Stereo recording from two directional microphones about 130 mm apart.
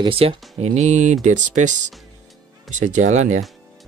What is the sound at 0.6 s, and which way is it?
Speech, 60° right (ahead or behind).